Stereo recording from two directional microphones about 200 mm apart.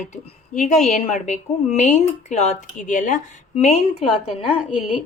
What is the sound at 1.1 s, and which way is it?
Speech, 35° left (ahead or behind).